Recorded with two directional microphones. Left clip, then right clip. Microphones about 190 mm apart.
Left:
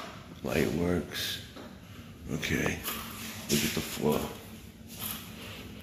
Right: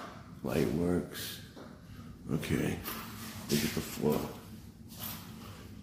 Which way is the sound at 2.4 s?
25° right (ahead or behind).